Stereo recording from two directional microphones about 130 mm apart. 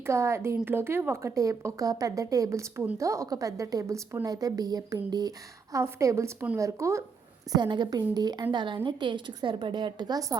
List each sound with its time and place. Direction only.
0.0 s a woman's voice: 20° right (ahead or behind)
7.5 s a woman's voice: 35° right (ahead or behind)